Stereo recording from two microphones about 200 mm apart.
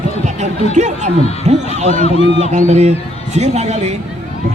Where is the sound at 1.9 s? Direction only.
30° left (ahead or behind).